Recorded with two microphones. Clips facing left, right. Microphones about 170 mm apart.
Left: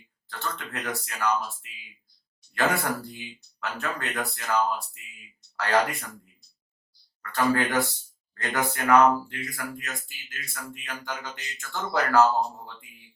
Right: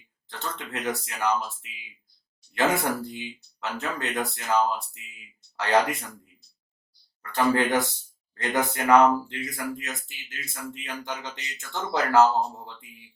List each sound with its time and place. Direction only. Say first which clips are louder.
0.3 s speech: even; 20° right (ahead or behind)
7.2 s speech: right 1 dB; 20° right (ahead or behind)